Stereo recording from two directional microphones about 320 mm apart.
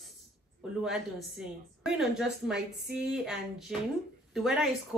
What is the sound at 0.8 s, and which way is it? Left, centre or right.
A woman's voice, centre.